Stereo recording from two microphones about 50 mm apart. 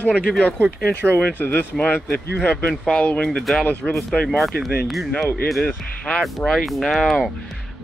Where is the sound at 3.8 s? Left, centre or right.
Centre.